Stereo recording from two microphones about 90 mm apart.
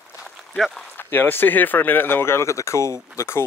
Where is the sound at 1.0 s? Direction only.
25° left (ahead or behind).